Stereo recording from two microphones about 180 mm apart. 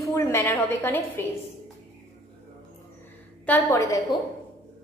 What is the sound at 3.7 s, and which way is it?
Speech, 20° left (ahead or behind).